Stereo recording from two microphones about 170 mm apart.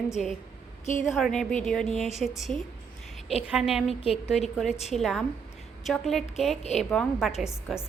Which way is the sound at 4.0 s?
35° left (ahead or behind).